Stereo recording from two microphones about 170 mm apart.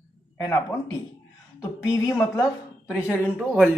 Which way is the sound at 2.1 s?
20° left (ahead or behind).